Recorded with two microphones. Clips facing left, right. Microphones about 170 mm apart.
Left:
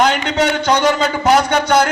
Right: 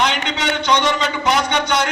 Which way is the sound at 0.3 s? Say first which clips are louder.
Left 4 dB; 45° left (ahead or behind).